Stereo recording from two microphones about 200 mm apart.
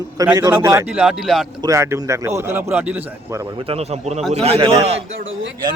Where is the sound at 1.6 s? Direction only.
15° right (ahead or behind).